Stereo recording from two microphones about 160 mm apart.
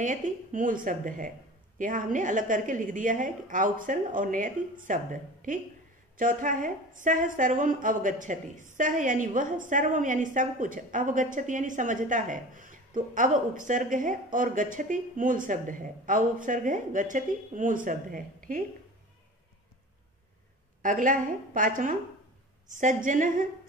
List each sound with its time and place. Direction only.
0.0 s a woman's voice: 50° right (ahead or behind)
20.8 s a woman's voice: 55° right (ahead or behind)